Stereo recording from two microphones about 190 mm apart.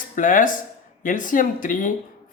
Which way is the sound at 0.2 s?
45° left (ahead or behind).